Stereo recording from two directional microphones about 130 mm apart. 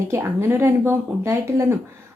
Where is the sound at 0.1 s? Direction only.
20° right (ahead or behind).